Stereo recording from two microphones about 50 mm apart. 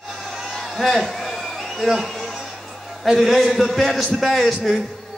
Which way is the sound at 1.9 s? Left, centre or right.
Centre.